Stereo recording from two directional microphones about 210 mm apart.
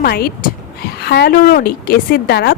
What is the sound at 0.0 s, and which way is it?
A woman's voice, 50° left (ahead or behind).